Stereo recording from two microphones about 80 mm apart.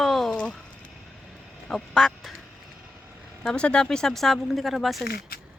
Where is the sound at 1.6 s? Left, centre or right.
Centre.